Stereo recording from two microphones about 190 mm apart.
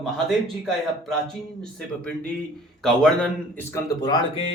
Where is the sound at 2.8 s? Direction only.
Centre (ahead or behind).